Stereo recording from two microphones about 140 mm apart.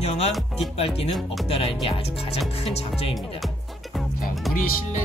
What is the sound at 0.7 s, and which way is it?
Speech, 45° left (ahead or behind).